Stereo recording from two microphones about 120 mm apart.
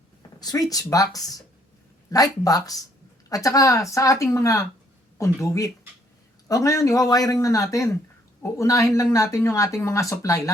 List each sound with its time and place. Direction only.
0.2 s speech: 30° left (ahead or behind)